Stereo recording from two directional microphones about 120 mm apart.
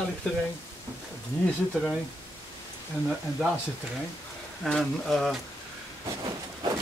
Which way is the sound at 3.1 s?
Centre (ahead or behind).